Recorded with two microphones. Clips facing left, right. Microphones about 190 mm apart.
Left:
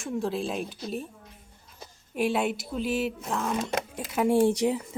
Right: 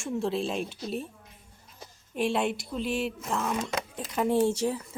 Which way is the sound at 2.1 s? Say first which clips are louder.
Left 1 dB; 5° left (ahead or behind).